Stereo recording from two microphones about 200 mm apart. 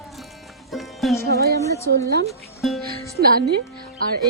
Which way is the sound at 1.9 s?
55° right (ahead or behind).